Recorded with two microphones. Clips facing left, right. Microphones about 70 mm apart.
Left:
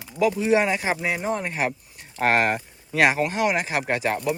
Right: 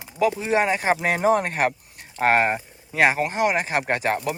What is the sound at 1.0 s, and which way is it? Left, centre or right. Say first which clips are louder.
Speech: right 6 dB; right.